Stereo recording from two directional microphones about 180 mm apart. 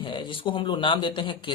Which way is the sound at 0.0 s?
25° left (ahead or behind).